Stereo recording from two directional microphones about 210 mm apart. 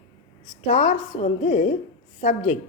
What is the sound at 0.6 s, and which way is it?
A woman's voice, 40° left (ahead or behind).